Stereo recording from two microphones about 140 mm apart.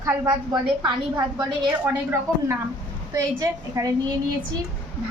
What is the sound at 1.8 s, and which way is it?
A woman's voice, 15° right (ahead or behind).